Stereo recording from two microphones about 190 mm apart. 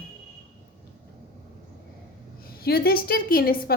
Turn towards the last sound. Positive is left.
turn(degrees=50)  # may be behind; listen again after turning